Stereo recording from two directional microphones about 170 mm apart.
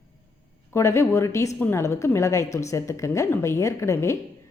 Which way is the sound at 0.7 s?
15° left (ahead or behind).